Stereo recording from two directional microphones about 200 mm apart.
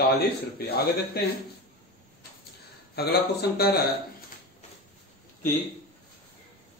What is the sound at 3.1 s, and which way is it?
Speech, 50° left (ahead or behind).